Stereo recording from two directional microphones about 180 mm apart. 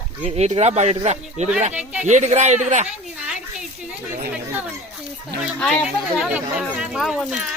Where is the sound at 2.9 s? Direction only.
5° right (ahead or behind).